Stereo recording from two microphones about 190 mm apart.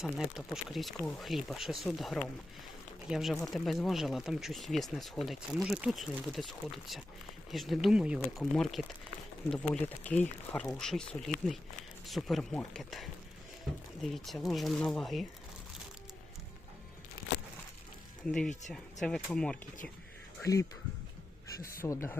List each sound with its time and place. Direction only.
0.0 s speech: centre (ahead or behind)
18.3 s speech: 5° left (ahead or behind)
20.4 s speech: 15° left (ahead or behind)
21.8 s speech: 15° left (ahead or behind)